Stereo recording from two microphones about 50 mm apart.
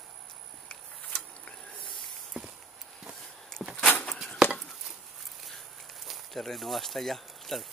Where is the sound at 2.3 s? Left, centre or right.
Centre.